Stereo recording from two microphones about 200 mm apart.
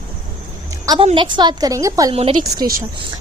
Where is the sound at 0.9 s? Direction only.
25° right (ahead or behind).